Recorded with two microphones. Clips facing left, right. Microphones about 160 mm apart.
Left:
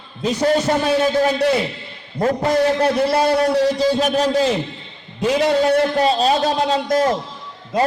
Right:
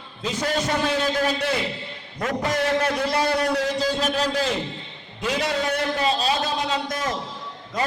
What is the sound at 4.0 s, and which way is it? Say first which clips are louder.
Speech: left 6 dB; 50° left (ahead or behind).